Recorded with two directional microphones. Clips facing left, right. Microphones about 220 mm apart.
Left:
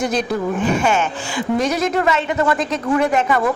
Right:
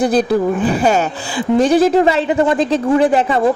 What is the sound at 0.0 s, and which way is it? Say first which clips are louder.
A woman's voice: right 6 dB; 35° right (ahead or behind).